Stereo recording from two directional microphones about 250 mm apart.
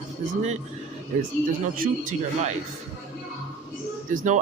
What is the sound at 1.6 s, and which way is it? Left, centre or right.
Speech, right.